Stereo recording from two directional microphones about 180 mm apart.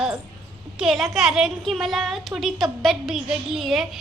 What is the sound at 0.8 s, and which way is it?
Speech, centre (ahead or behind).